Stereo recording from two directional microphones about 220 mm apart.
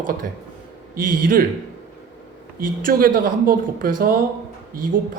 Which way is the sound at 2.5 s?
40° right (ahead or behind).